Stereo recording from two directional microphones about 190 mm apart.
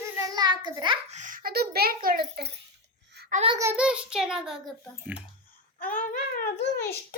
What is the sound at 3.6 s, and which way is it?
A child's voice, 10° right (ahead or behind).